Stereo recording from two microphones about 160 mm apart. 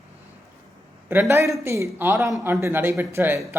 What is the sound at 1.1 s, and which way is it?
Speech, 15° right (ahead or behind).